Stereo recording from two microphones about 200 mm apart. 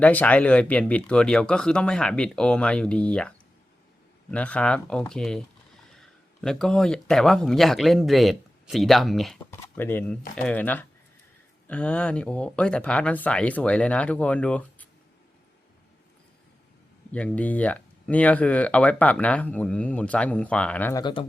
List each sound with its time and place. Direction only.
0.0 s speech: 5° left (ahead or behind)
9.5 s speech: 10° left (ahead or behind)
17.1 s speech: 5° left (ahead or behind)
21.0 s speech: 25° left (ahead or behind)